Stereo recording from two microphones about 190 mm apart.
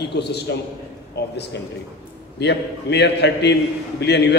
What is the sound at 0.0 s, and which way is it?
A man's voice, 60° left (ahead or behind).